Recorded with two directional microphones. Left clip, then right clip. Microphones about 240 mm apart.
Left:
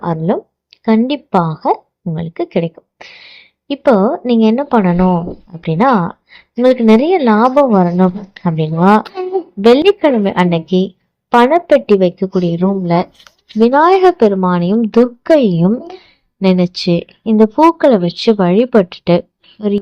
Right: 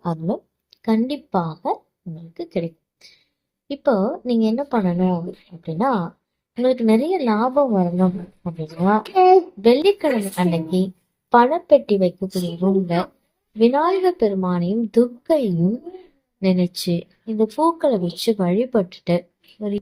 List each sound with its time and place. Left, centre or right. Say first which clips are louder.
0.0 s a woman's voice: left 9 dB; left